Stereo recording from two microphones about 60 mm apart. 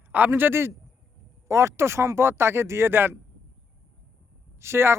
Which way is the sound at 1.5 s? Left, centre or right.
Right.